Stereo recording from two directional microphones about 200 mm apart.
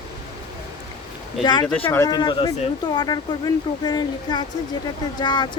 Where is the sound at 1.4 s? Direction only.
20° left (ahead or behind).